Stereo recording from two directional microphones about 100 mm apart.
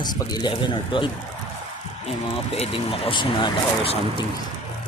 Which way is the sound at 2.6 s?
70° left (ahead or behind).